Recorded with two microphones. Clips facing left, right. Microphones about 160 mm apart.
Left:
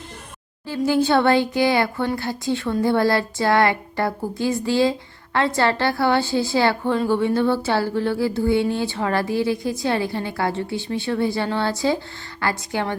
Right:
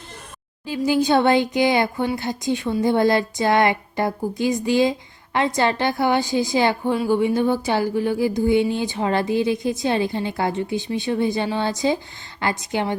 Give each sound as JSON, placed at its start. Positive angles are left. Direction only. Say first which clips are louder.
{"t": 0.9, "sound": "a woman's voice", "louder": "even", "side_deg": -15}